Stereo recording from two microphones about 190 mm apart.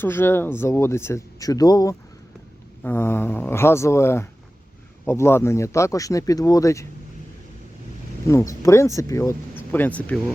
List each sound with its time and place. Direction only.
0.0 s speech: 10° left (ahead or behind)
8.3 s speech: 15° left (ahead or behind)